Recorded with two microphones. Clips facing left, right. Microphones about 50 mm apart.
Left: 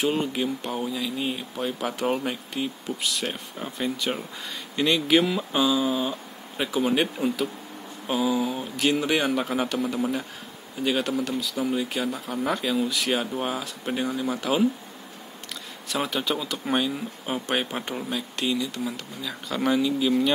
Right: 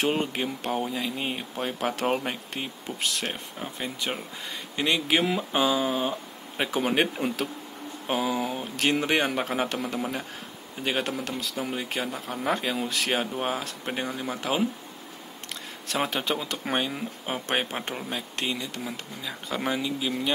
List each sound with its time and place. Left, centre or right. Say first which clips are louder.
0.1 s speech: left 2 dB; right
3.8 s speech: left 5 dB; right
5.6 s speech: left 2 dB; right
11.2 s speech: left 4 dB; right
11.5 s speech: left 4 dB; right
15.9 s speech: left 1 dB; right